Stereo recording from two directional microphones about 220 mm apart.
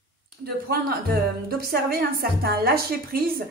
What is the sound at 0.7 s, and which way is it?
A woman's voice, 45° right (ahead or behind).